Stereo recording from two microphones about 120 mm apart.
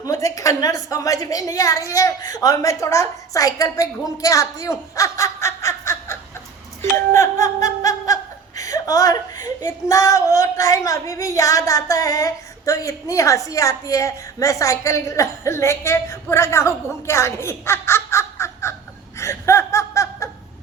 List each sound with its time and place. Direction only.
0.0 s a woman's voice: 25° left (ahead or behind)
19.1 s laughter: 25° left (ahead or behind)